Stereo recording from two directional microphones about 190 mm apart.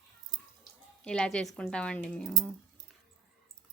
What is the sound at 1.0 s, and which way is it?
A woman's voice, 5° left (ahead or behind).